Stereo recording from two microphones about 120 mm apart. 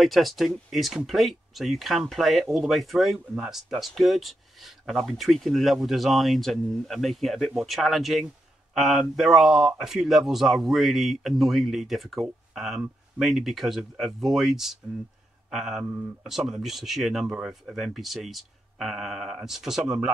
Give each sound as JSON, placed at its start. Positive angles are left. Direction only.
{"t": 0.0, "sound": "speech", "side_deg": 0}
{"t": 15.8, "sound": "speech", "side_deg": -15}
{"t": 16.3, "sound": "speech", "side_deg": -5}